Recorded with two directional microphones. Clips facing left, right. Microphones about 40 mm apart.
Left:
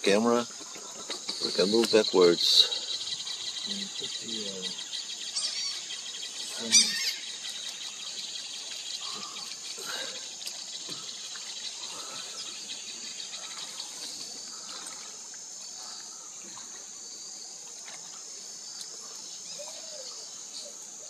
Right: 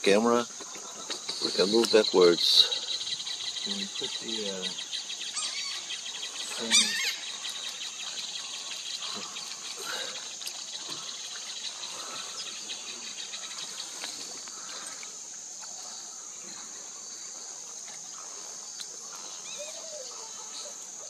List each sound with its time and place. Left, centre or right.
0.2 s speech: centre
3.6 s speech: centre
5.3 s a sound: right
6.7 s goose: right